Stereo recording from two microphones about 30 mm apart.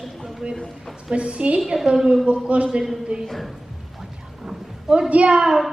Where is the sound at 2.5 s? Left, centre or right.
Right.